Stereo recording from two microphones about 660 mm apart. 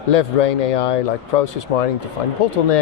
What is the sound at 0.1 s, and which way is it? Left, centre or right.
Speech, left.